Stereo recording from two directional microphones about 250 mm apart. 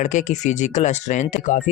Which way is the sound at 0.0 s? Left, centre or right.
Left.